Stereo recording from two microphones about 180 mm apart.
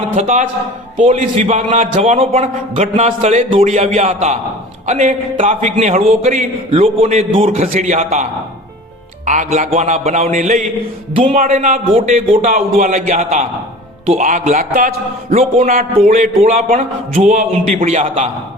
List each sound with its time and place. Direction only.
0.2 s a man's voice: 40° right (ahead or behind)
11.1 s a man's voice: 30° right (ahead or behind)
11.3 s a man's voice: 40° right (ahead or behind)